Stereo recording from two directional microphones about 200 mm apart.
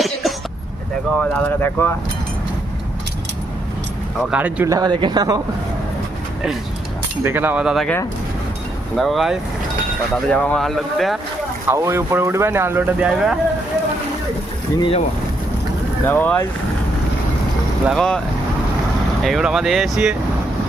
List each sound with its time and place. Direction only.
0.0 s vehicle: centre (ahead or behind)
1.2 s speech: 5° left (ahead or behind)
4.3 s speech: 5° right (ahead or behind)
7.3 s speech: 10° right (ahead or behind)
9.0 s speech: centre (ahead or behind)
11.7 s speech: 15° right (ahead or behind)
14.8 s speech: 25° left (ahead or behind)
16.0 s speech: 10° left (ahead or behind)
17.8 s speech: 5° left (ahead or behind)
19.2 s speech: centre (ahead or behind)